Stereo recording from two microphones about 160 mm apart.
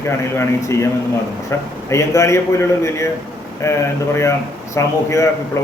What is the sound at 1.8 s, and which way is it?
A man's voice, 20° left (ahead or behind).